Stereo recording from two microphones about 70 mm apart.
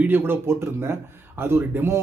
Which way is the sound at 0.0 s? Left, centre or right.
Right.